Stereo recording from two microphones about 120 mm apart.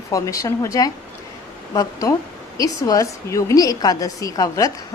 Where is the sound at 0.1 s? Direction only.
30° left (ahead or behind).